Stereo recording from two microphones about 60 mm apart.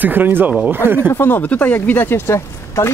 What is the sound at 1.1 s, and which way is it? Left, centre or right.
Speech, left.